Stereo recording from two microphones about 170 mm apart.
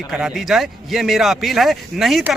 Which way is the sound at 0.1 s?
5° right (ahead or behind).